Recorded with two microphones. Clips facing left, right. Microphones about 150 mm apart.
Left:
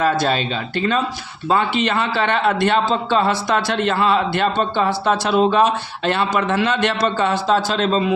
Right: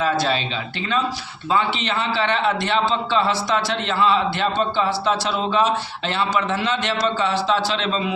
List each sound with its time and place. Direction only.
0.0 s a man's voice: 50° left (ahead or behind)